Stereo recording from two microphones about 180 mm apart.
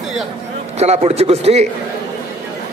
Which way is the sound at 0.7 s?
35° right (ahead or behind).